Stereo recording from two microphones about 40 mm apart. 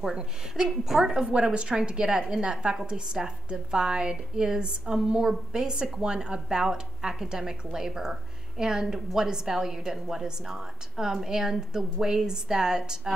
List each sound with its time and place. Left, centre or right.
0.0 s a woman's voice: centre
0.7 s a woman's voice: centre
1.3 s a woman's voice: right